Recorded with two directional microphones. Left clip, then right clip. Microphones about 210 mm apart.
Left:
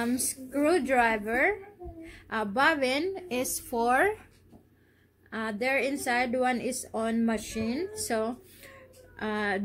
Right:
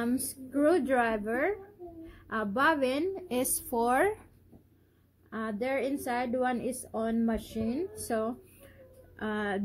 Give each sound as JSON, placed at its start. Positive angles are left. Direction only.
{"t": 0.0, "sound": "a woman's voice", "side_deg": -15}
{"t": 5.3, "sound": "a woman's voice", "side_deg": -15}